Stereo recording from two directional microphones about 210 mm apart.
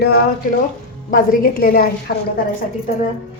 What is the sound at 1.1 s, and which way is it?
A woman's voice, 45° left (ahead or behind).